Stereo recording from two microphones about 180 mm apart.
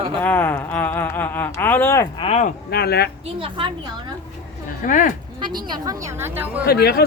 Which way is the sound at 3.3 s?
30° right (ahead or behind).